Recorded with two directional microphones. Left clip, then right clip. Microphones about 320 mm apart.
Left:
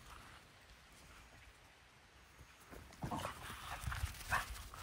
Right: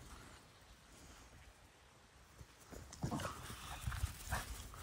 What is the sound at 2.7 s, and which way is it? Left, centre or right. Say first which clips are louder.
Dog: left 1 dB; left.